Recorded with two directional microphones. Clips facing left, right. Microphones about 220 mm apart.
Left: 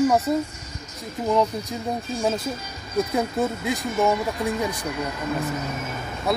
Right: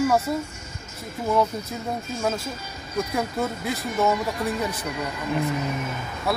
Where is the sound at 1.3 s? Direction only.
15° left (ahead or behind).